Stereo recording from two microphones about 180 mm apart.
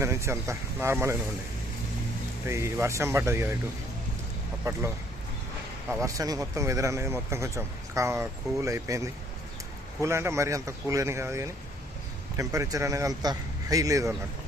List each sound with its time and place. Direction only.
0.0 s speech: 15° right (ahead or behind)
2.5 s speech: 15° right (ahead or behind)
4.7 s speech: 15° right (ahead or behind)
5.9 s speech: 15° right (ahead or behind)